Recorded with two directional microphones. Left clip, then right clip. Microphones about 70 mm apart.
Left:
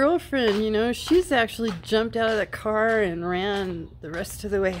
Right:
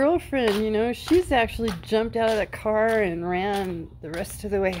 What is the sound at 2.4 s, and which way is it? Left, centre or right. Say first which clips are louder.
Speech: right 1 dB; left.